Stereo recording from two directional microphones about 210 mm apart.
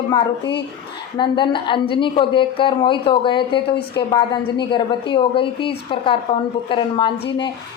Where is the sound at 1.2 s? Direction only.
20° left (ahead or behind).